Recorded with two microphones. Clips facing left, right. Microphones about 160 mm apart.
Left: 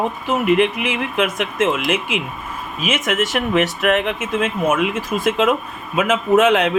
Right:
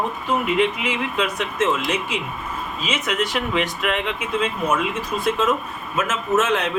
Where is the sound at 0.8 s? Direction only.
60° left (ahead or behind).